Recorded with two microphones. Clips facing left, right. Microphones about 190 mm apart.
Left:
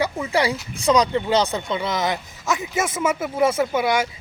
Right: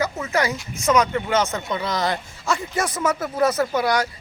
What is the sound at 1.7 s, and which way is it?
Speech, 20° left (ahead or behind).